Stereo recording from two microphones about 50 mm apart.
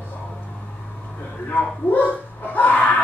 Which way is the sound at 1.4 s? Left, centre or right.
Left.